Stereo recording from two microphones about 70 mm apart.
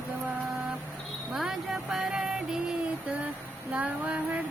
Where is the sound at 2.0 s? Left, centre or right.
Centre.